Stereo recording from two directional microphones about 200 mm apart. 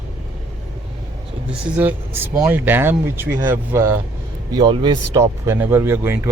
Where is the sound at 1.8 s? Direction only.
10° right (ahead or behind).